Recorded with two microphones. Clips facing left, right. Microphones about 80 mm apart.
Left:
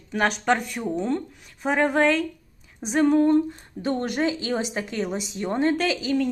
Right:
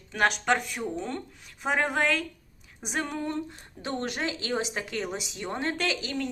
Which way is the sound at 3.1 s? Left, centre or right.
Left.